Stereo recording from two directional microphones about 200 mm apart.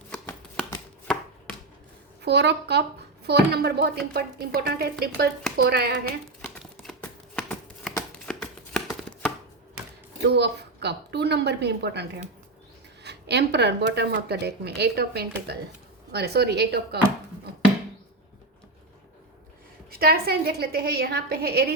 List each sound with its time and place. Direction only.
1.0 s chopping: 5° left (ahead or behind)
2.2 s speech: 55° right (ahead or behind)
6.4 s a sound: 5° left (ahead or behind)
8.3 s chopping: 5° left (ahead or behind)
10.2 s speech: 55° right (ahead or behind)
19.9 s speech: 50° right (ahead or behind)